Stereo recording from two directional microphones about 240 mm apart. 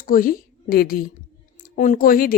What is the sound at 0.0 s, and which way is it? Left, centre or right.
A woman's voice, left.